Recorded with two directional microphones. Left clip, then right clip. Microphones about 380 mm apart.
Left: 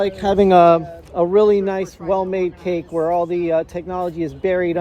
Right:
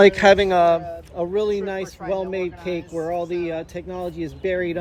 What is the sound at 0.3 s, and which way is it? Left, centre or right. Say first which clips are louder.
A man's voice: left 5 dB; centre.